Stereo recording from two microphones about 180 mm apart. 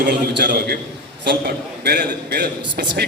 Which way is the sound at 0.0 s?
70° right (ahead or behind).